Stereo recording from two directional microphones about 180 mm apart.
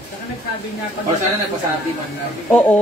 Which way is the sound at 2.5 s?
5° left (ahead or behind).